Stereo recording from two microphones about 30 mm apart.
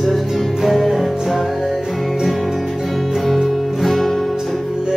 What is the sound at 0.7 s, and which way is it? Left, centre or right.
Music, centre.